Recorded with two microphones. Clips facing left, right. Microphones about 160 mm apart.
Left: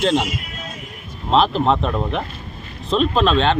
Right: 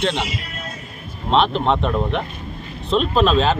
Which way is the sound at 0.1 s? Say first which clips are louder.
Left 5 dB; 45° left (ahead or behind).